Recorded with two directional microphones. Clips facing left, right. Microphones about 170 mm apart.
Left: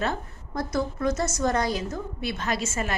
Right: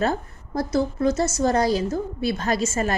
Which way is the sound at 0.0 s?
35° right (ahead or behind).